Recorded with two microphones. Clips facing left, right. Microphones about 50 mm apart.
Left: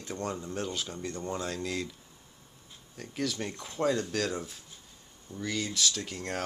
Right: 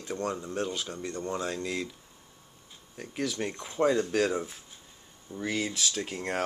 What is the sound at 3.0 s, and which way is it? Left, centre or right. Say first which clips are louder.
Speech: right 2 dB; centre.